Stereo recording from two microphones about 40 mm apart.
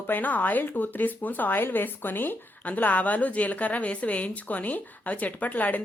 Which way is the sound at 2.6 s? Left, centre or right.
Left.